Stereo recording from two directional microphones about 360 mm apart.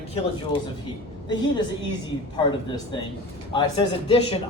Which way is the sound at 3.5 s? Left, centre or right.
Centre.